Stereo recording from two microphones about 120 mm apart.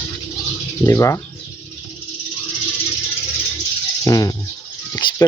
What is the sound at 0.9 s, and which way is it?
Speech, 25° left (ahead or behind).